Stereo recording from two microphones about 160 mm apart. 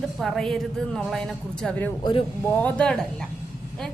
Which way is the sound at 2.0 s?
30° left (ahead or behind).